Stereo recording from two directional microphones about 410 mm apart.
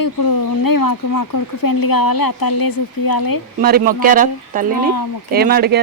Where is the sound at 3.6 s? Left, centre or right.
Right.